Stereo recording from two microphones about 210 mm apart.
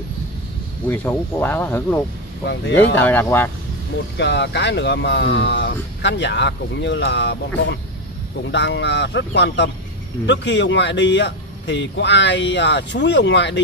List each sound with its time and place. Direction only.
0.8 s speech: 10° left (ahead or behind)
4.2 s speech: 55° left (ahead or behind)